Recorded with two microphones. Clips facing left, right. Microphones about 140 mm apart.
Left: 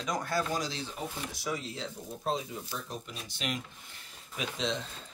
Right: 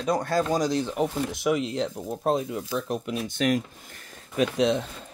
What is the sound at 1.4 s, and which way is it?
Speech, 85° right.